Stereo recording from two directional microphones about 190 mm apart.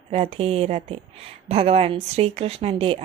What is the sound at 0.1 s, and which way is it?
Speech, 30° right (ahead or behind).